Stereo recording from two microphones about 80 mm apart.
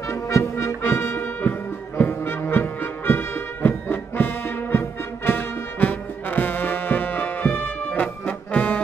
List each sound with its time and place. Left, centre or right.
0.1 s brass instrument: left
2.0 s music: left